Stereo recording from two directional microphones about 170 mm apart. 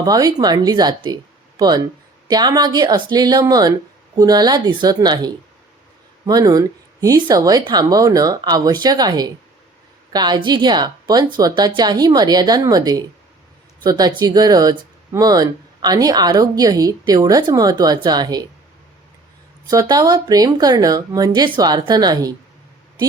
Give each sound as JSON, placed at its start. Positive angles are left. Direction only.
{"t": 0.0, "sound": "speech", "side_deg": -20}
{"t": 19.6, "sound": "speech", "side_deg": -20}